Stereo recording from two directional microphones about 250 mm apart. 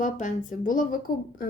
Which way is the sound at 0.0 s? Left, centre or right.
Left.